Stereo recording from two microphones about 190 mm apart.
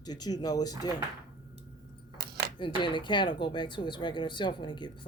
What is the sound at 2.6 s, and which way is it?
Speech, 25° left (ahead or behind).